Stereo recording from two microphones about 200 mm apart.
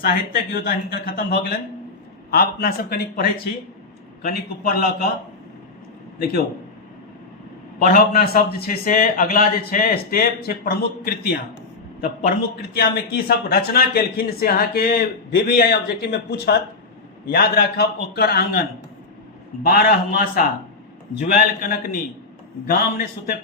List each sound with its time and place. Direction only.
0.0 s speech: 50° left (ahead or behind)
6.1 s speech: 50° left (ahead or behind)
7.8 s speech: 45° left (ahead or behind)
12.7 s speech: 50° left (ahead or behind)
19.6 s speech: 50° left (ahead or behind)